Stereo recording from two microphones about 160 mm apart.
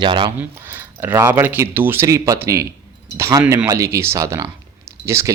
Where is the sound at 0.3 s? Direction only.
10° right (ahead or behind).